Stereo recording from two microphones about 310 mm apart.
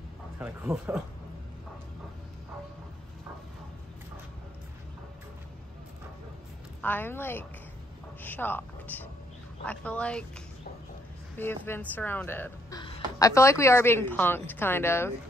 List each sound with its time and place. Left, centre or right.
0.4 s speech: centre
6.8 s speech: centre
11.3 s speech: centre